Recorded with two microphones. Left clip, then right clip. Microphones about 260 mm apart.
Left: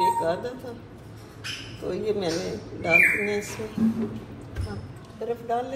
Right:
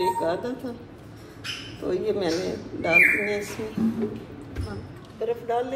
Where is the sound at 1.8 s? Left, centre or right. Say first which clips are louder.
Right 2 dB; right.